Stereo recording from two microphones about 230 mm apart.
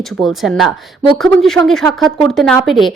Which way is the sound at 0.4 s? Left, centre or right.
Centre.